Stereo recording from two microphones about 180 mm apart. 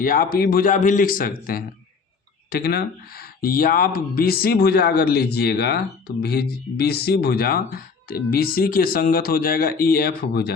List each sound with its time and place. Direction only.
0.0 s speech: 50° left (ahead or behind)